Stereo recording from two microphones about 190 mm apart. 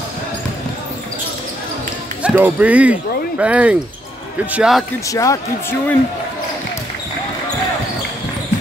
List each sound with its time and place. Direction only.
2.2 s speech: 10° right (ahead or behind)
5.0 s speech: 15° left (ahead or behind)